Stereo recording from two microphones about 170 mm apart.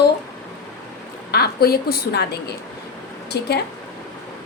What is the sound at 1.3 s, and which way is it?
A woman's voice, 65° left (ahead or behind).